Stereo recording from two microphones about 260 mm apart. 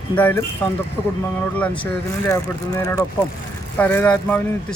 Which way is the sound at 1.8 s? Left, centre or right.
Centre.